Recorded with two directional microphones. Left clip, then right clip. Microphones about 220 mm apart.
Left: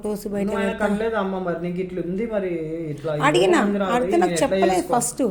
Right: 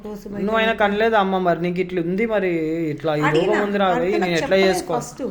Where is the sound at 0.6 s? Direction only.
45° right (ahead or behind).